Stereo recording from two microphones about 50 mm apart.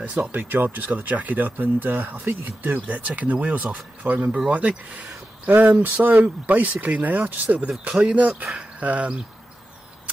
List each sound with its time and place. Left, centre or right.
0.2 s speech: right
7.8 s speech: right